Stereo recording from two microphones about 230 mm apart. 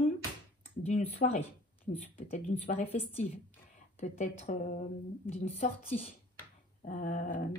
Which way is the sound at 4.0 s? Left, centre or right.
Left.